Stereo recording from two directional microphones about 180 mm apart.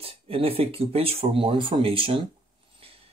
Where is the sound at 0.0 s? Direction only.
30° right (ahead or behind).